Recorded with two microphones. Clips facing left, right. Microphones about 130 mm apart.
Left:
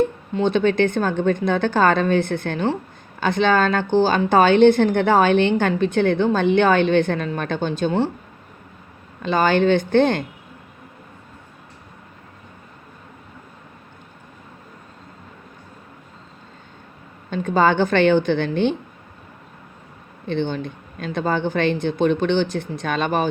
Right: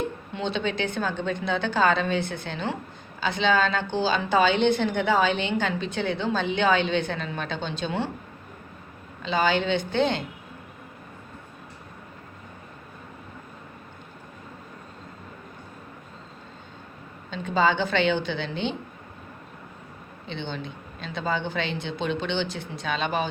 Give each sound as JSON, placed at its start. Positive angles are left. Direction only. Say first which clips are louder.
{"t": 0.3, "sound": "a woman's voice", "louder": "left 10 dB", "side_deg": 50}
{"t": 9.2, "sound": "a woman's voice", "louder": "left 6 dB", "side_deg": 50}
{"t": 17.3, "sound": "a woman's voice", "louder": "left 6 dB", "side_deg": 50}
{"t": 20.2, "sound": "a woman's voice", "louder": "left 10 dB", "side_deg": 50}